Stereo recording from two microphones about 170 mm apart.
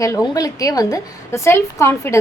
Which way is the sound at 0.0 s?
20° left (ahead or behind).